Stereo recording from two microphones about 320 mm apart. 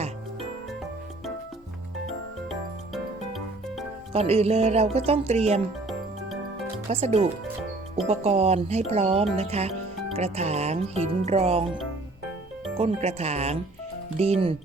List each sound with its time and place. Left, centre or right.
2.0 s music: centre
4.1 s speech: centre
6.9 s speech: centre
12.7 s speech: centre